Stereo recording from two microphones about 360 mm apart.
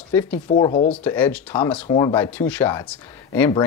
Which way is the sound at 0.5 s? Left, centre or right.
Centre.